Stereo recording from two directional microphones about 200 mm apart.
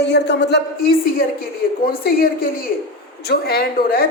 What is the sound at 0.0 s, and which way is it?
A man's voice, 60° left (ahead or behind).